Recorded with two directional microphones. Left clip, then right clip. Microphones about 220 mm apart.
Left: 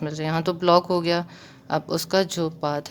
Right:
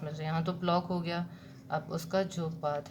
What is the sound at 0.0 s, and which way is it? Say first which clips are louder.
Speech: left 10 dB; 50° left (ahead or behind).